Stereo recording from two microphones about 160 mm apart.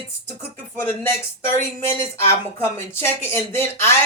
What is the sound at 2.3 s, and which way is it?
Speech, 15° left (ahead or behind).